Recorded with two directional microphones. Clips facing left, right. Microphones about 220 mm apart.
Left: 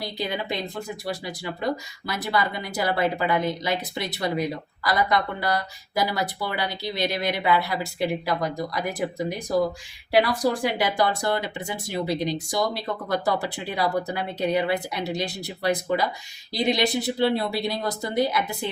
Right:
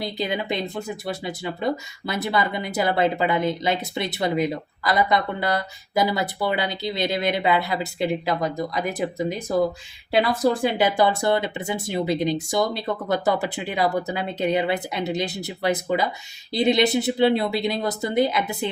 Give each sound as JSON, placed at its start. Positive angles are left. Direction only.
{"t": 0.0, "sound": "speech", "side_deg": -20}